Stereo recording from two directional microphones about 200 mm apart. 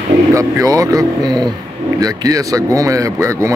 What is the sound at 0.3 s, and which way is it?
Speech, 15° right (ahead or behind).